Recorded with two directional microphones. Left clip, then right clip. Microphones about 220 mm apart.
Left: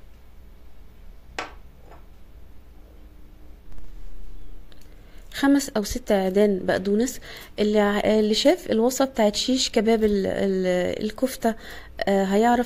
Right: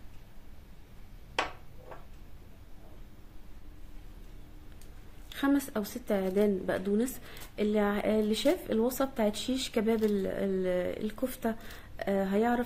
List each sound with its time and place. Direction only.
5.3 s a woman's voice: 35° left (ahead or behind)